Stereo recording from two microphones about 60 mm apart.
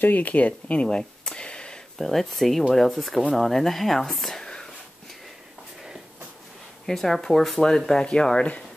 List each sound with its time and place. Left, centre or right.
0.0 s speech: left
0.8 s a sound: centre
2.0 s speech: centre
6.9 s speech: centre